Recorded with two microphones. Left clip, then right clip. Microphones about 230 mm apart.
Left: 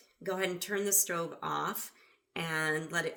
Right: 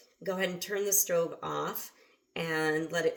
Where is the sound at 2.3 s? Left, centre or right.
Left.